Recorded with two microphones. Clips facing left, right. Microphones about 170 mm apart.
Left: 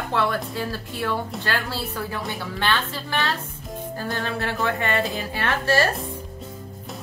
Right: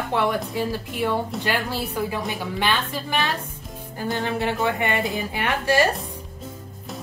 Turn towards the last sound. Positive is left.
turn(degrees=-15)  # may be behind; listen again after turning